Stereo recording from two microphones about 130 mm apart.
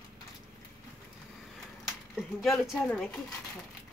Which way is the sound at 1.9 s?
Centre (ahead or behind).